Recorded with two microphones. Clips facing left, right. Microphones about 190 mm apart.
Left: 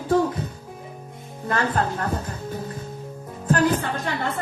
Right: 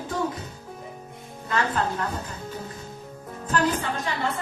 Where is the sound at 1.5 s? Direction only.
55° left (ahead or behind).